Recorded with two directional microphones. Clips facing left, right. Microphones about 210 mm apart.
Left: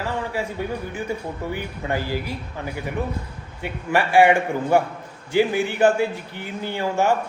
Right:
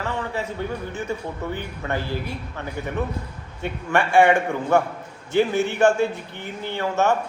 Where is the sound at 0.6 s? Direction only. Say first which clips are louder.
Left 1 dB; 10° left (ahead or behind).